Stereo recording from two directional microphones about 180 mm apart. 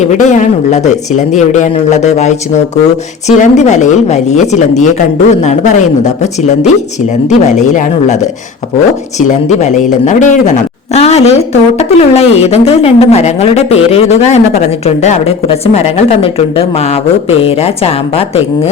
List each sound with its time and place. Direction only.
0.0 s speech: 40° left (ahead or behind)
7.3 s speech: 40° left (ahead or behind)